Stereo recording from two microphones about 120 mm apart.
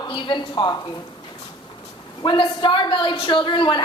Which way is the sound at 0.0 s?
40° left (ahead or behind).